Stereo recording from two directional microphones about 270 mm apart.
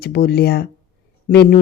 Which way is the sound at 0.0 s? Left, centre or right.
Left.